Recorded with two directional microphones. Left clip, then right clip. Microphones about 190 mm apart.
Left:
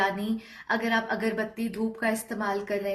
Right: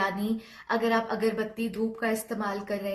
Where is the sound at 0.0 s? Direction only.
20° right (ahead or behind).